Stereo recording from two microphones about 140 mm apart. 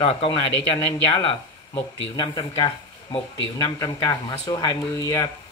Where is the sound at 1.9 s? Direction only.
35° left (ahead or behind).